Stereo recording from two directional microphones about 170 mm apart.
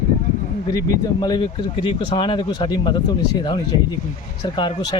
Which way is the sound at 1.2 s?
25° left (ahead or behind).